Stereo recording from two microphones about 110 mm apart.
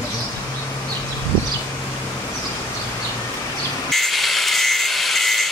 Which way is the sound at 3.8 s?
Centre (ahead or behind).